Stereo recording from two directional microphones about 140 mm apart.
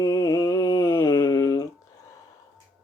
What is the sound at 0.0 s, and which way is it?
Mantra, 25° left (ahead or behind).